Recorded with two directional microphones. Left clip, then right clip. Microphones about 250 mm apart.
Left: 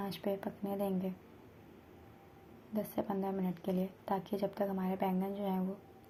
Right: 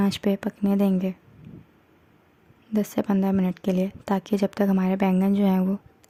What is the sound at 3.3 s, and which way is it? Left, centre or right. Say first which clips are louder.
Speech: right 11 dB; right.